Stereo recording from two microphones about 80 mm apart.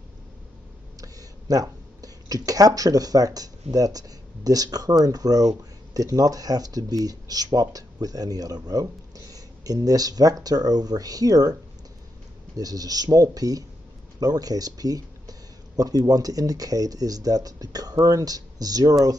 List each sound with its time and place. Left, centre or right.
1.0 s speech: right
12.5 s speech: right